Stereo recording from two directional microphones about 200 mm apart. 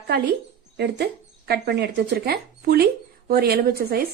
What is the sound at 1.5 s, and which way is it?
A woman's voice, 55° right (ahead or behind).